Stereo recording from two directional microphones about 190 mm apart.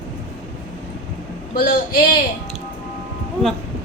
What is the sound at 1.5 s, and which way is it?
Speech, 45° left (ahead or behind).